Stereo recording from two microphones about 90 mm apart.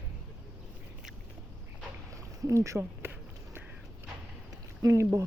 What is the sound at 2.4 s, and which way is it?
Speech, 35° right (ahead or behind).